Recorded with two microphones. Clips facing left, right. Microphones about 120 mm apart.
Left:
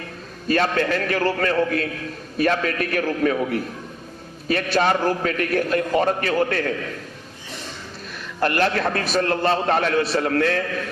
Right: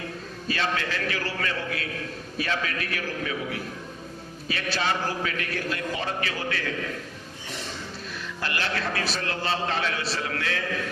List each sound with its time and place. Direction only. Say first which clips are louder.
0.4 s a man's voice: left 8 dB; 50° left (ahead or behind)
8.4 s a man's voice: left 10 dB; 50° left (ahead or behind)